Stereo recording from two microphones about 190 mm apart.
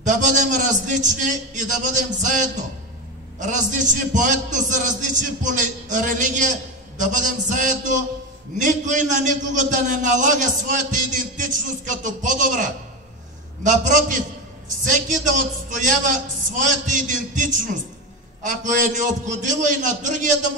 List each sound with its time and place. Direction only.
0.0 s a man's voice: 40° right (ahead or behind)